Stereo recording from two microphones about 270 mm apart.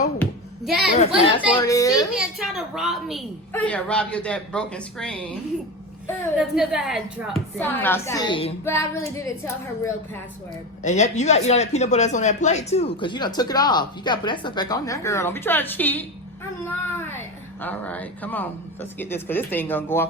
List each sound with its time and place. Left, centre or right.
0.2 s a sound: centre
1.2 s speech: centre
2.1 s a woman's voice: centre
6.4 s speech: centre
10.8 s a child's voice: left; by 20.1 s centre